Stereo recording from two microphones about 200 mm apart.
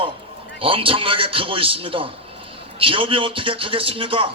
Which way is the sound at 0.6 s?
25° right (ahead or behind).